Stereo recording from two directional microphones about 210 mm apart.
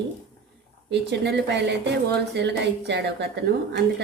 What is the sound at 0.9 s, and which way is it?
A woman's voice, 55° right (ahead or behind).